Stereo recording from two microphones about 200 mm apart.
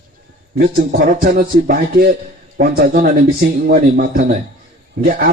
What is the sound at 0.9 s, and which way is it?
A man's voice, 45° right (ahead or behind).